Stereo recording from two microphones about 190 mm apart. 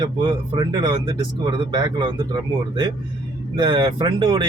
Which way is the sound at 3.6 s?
25° right (ahead or behind).